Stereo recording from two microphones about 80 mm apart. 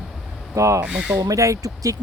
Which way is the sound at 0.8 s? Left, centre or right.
Centre.